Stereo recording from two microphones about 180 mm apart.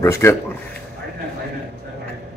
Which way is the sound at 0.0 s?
15° left (ahead or behind).